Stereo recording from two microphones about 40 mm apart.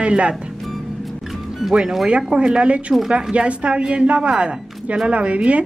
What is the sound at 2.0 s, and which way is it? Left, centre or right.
A woman's voice, right.